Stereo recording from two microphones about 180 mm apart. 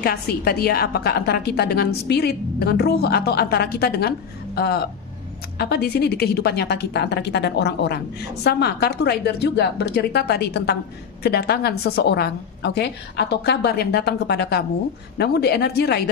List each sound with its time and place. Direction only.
0.0 s a woman's voice: 60° left (ahead or behind)